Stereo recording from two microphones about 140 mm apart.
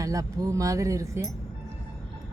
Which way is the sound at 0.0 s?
25° right (ahead or behind).